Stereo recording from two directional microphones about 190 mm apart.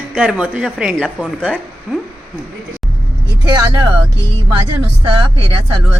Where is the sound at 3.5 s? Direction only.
20° right (ahead or behind).